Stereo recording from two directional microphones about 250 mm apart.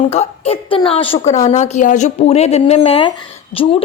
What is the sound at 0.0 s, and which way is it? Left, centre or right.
A woman's voice, left.